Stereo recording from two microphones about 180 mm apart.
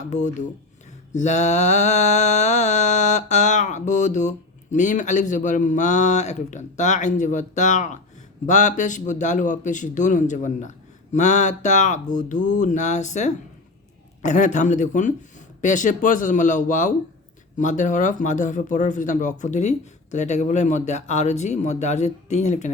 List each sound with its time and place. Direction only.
0.0 s mantra: 40° left (ahead or behind)
8.4 s a man's voice: 45° left (ahead or behind)
17.6 s mantra: 45° left (ahead or behind)